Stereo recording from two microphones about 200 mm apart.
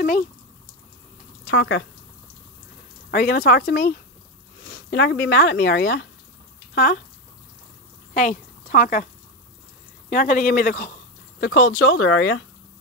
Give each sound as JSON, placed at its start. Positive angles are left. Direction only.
{"t": 1.5, "sound": "speech", "side_deg": 70}
{"t": 3.1, "sound": "speech", "side_deg": 50}
{"t": 8.1, "sound": "a woman's voice", "side_deg": 45}
{"t": 11.3, "sound": "speech", "side_deg": 60}